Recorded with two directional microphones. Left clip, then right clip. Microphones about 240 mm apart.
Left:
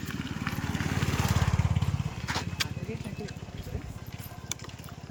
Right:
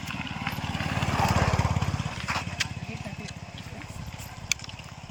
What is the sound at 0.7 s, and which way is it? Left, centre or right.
Vehicle, centre.